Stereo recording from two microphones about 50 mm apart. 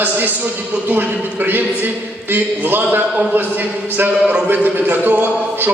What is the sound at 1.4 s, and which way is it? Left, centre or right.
Speech, right.